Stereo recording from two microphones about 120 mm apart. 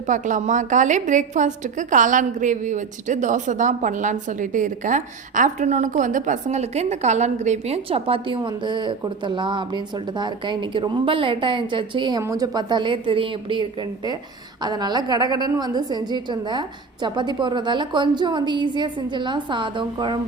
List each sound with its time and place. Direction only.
0.1 s a woman's voice: 90° right; by 8.4 s 55° right (ahead or behind)
8.4 s a woman's voice: 35° right (ahead or behind)
12.2 s a woman's voice: 30° right (ahead or behind)